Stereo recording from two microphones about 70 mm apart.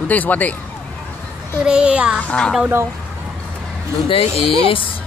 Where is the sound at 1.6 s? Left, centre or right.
Centre.